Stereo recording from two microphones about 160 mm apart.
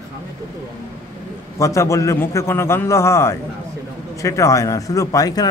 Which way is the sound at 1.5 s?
20° left (ahead or behind).